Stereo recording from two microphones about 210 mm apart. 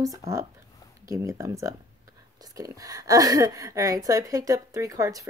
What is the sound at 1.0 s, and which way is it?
Speech, 15° right (ahead or behind).